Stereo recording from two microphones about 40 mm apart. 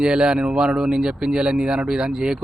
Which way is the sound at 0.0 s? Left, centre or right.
Right.